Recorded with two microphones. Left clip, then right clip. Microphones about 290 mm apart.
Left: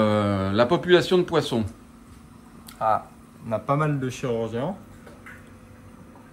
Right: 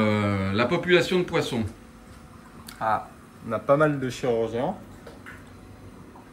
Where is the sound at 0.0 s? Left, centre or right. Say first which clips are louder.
Left 3 dB; centre.